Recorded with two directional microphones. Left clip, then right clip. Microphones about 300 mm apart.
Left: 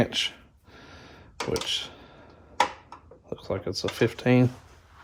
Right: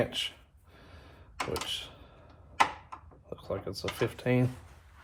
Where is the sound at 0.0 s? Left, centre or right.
Left.